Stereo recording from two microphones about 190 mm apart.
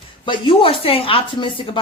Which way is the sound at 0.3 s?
30° left (ahead or behind).